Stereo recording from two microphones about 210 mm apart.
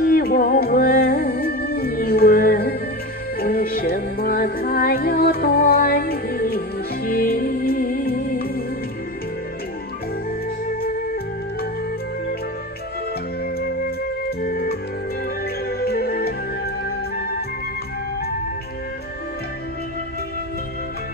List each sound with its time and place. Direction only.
0.0 s music: 45° left (ahead or behind)
10.7 s music: 45° left (ahead or behind)
13.4 s flute: 45° left (ahead or behind)
14.4 s music: 45° left (ahead or behind)
15.8 s music: 45° left (ahead or behind)